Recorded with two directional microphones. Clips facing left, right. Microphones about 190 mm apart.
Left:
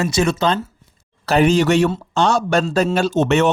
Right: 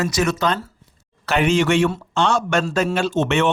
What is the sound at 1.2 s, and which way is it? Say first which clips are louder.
Speech: left 3 dB; 35° left (ahead or behind).